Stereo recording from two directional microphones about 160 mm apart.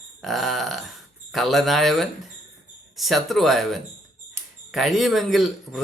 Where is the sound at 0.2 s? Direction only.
Centre (ahead or behind).